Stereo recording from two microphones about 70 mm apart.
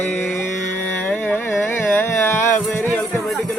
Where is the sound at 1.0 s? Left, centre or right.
Left.